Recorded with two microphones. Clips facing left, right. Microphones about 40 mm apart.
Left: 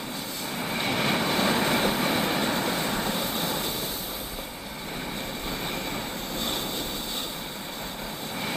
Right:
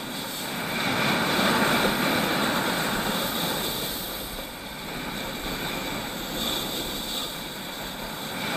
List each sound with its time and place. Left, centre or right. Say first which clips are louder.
0.6 s vehicle: right 1 dB; centre
0.8 s vehicle: right 1 dB; right
6.3 s vehicle: right 1 dB; right